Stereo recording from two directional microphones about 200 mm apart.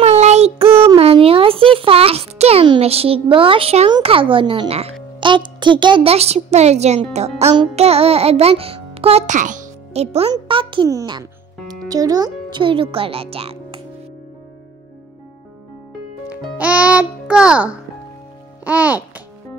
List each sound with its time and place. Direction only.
0.0 s child singing: 35° right (ahead or behind)
0.9 s a child's voice: 30° right (ahead or behind)
16.3 s a child's voice: 5° right (ahead or behind)
18.6 s babbling: 10° right (ahead or behind)